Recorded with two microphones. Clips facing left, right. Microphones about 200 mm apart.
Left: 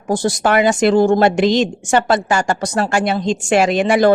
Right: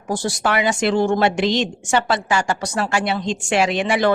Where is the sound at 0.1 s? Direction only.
45° left (ahead or behind).